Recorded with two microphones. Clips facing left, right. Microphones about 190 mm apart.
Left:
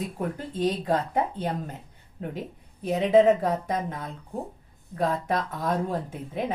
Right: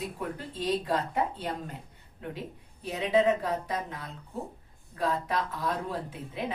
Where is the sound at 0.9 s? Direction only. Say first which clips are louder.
Left 4 dB; 45° left (ahead or behind).